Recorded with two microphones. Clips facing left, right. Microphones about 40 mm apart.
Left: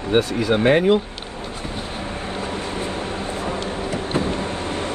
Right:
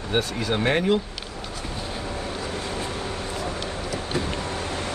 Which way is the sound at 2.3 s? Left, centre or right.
Left.